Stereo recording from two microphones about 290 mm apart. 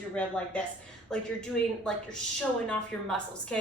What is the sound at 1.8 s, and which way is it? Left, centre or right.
A woman's voice, centre.